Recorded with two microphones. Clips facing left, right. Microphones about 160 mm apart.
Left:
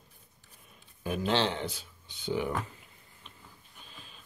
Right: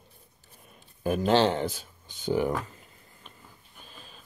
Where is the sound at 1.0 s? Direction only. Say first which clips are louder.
Right 6 dB; 45° right (ahead or behind).